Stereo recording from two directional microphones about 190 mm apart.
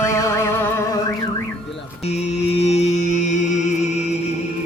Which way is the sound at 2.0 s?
35° left (ahead or behind).